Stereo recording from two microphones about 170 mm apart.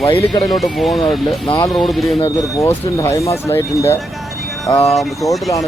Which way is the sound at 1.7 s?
Centre (ahead or behind).